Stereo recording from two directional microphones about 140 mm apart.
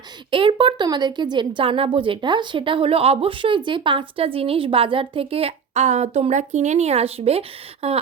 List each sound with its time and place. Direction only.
0.3 s a woman's voice: 40° right (ahead or behind)